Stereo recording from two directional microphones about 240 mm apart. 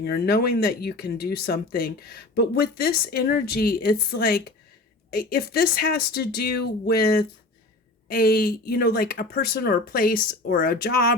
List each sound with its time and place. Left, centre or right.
0.0 s speech: left